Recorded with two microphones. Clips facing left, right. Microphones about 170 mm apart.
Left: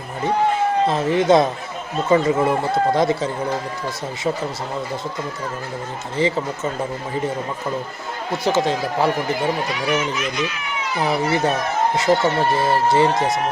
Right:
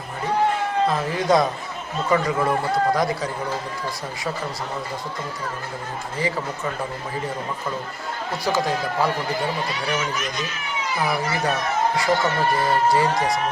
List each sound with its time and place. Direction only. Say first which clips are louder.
0.9 s a man's voice: left 5 dB; 25° left (ahead or behind)
6.1 s a man's voice: left 6 dB; 25° left (ahead or behind)
8.5 s a man's voice: left 1 dB; 25° left (ahead or behind)
11.0 s a man's voice: left 5 dB; 25° left (ahead or behind)